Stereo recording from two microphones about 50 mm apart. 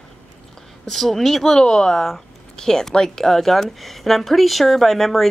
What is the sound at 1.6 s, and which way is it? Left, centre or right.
Speech, centre.